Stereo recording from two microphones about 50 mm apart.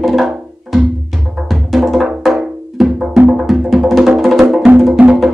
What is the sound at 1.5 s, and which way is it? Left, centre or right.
Music, centre.